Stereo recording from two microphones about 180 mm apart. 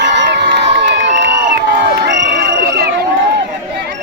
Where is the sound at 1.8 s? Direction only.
70° right (ahead or behind).